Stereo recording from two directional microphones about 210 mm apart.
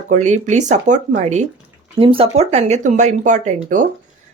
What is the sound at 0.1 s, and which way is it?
Speech, 35° right (ahead or behind).